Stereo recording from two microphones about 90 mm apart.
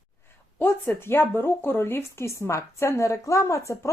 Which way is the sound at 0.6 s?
25° left (ahead or behind).